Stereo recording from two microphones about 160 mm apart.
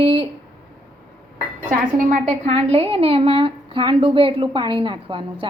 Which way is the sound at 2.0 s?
55° right (ahead or behind).